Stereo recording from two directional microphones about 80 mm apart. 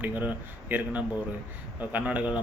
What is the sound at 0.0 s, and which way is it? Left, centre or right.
Speech, right.